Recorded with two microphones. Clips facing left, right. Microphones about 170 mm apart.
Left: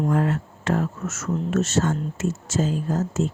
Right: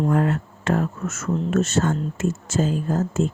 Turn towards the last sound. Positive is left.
turn(degrees=-55)  # may be behind; listen again after turning